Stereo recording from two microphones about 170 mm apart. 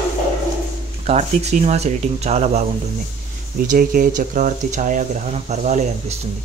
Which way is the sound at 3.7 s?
55° right (ahead or behind).